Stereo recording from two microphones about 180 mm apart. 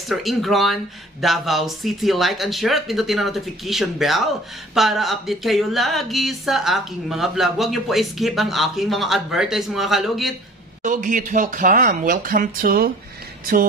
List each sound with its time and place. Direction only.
0.1 s speech: centre (ahead or behind)
10.8 s speech: 45° right (ahead or behind)